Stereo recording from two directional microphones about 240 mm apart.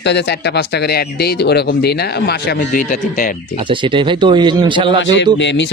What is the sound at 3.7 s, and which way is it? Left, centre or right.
A man's voice, centre.